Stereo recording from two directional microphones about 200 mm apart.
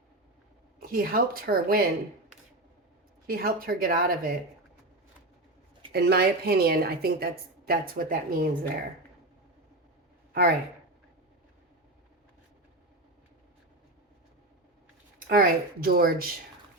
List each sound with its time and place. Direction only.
0.8 s a woman's voice: 45° right (ahead or behind)
3.2 s a woman's voice: 50° right (ahead or behind)
5.9 s a woman's voice: 55° right (ahead or behind)
15.3 s a woman's voice: 45° right (ahead or behind)